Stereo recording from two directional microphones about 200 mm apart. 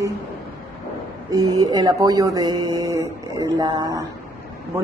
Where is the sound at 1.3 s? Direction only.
20° right (ahead or behind).